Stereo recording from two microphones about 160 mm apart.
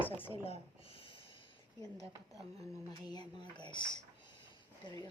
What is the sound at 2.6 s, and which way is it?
Speech, 25° left (ahead or behind).